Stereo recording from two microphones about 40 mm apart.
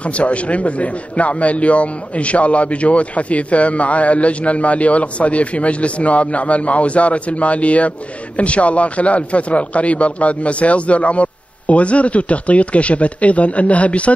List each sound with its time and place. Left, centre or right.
0.0 s a man's voice: left